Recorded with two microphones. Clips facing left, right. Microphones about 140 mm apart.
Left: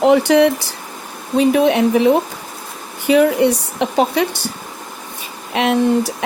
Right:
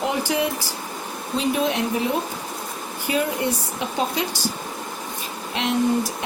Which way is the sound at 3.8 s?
70° left (ahead or behind).